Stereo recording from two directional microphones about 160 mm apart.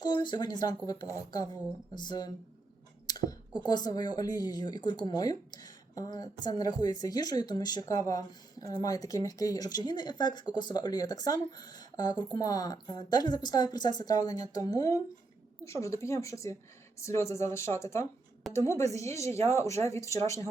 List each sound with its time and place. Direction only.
0.0 s speech: 30° left (ahead or behind)
19.3 s speech: 40° right (ahead or behind)
19.5 s speech: 20° left (ahead or behind)